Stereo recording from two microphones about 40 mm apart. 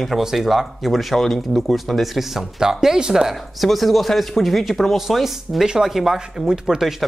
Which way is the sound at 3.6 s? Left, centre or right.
Centre.